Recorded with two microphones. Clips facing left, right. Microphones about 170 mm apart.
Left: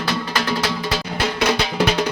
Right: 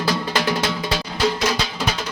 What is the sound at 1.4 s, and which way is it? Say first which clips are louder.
Music: left 4 dB; 60° left (ahead or behind).